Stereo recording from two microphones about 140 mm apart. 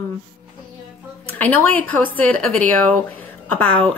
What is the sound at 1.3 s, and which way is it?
Speech, 10° left (ahead or behind).